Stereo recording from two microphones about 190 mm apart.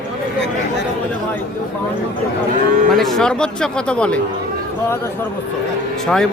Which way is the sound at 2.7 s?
45° right (ahead or behind).